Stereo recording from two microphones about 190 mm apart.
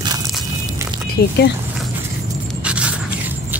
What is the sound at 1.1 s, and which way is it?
Speech, 60° left (ahead or behind).